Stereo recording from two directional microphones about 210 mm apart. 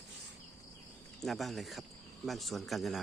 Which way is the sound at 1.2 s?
Centre (ahead or behind).